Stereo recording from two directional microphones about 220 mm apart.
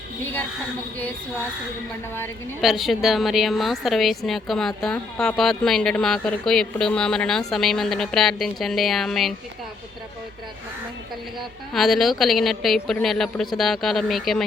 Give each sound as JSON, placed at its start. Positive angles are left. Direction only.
{"t": 0.9, "sound": "a sound", "side_deg": 10}
{"t": 2.6, "sound": "a woman's voice", "side_deg": 0}
{"t": 11.7, "sound": "a woman's voice", "side_deg": 0}